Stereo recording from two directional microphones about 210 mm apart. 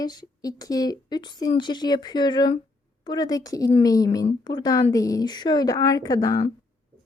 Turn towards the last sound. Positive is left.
turn(degrees=15)  # may be behind; listen again after turning